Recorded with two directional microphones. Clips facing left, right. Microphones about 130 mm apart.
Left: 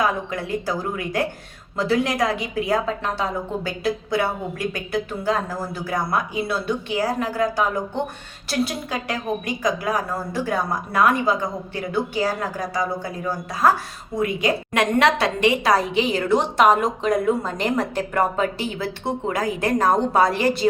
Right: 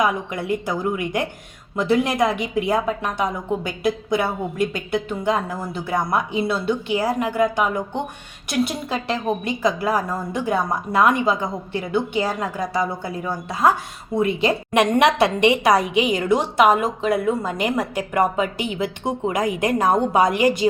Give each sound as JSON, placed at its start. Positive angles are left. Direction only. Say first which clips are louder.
{"t": 0.0, "sound": "a woman's voice", "louder": "right 1 dB", "side_deg": -20}